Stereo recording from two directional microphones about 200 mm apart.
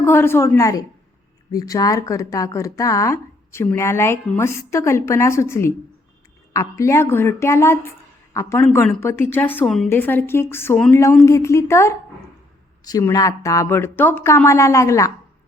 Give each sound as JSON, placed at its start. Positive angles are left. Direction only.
{"t": 0.0, "sound": "speech", "side_deg": 10}